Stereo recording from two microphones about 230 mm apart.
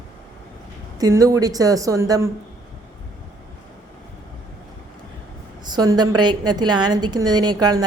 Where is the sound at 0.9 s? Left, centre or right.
Centre.